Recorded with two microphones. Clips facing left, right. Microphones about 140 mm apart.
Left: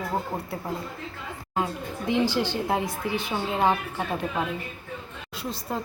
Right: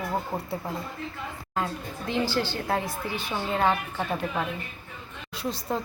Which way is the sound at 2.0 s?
15° left (ahead or behind).